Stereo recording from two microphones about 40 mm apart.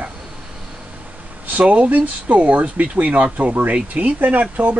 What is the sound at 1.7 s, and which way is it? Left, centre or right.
Speech, right.